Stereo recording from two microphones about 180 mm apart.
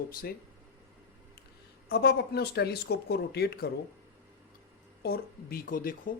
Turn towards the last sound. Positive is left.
turn(degrees=50)  # may be behind; listen again after turning